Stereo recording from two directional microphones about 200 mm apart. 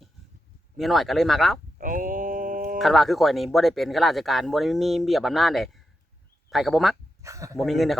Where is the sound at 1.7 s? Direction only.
40° right (ahead or behind).